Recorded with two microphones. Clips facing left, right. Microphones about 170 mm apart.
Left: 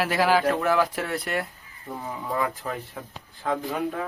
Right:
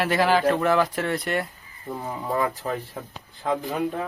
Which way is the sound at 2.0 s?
35° right (ahead or behind).